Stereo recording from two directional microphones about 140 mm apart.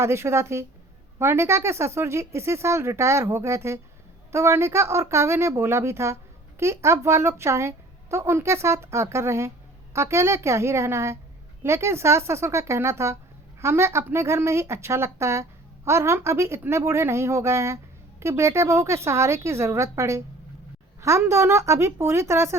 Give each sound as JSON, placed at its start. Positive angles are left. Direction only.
{"t": 0.0, "sound": "a woman's voice", "side_deg": -20}